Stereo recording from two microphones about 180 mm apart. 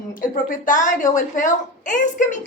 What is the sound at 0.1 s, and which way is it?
A woman's voice, 50° left (ahead or behind).